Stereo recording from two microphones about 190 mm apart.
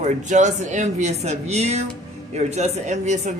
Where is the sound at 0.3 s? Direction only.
40° right (ahead or behind).